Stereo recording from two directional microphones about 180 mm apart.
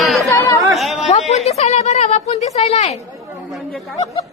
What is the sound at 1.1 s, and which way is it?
A woman's voice, 35° left (ahead or behind).